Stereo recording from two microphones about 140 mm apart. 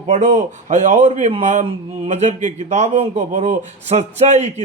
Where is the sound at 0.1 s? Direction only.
60° right (ahead or behind).